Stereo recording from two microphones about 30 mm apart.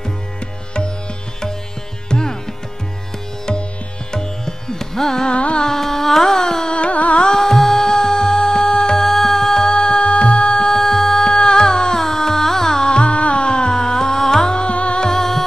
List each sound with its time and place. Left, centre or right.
2.0 s music: left
4.1 s music: left
5.3 s music: left
5.8 s a sound: centre
6.9 s music: left
7.2 s music: centre
9.0 s music: centre
10.2 s music: left
10.7 s music: centre
12.9 s music: left
13.7 s music: centre
14.7 s music: left
15.0 s music: centre